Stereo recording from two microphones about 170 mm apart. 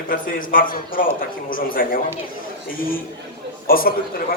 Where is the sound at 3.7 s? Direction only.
60° left (ahead or behind).